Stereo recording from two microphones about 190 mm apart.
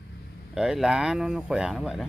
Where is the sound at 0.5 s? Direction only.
5° right (ahead or behind).